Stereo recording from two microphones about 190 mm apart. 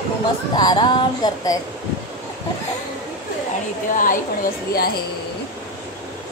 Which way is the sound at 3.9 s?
45° left (ahead or behind).